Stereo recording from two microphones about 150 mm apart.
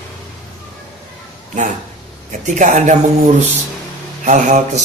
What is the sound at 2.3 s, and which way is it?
Speech, 55° right (ahead or behind).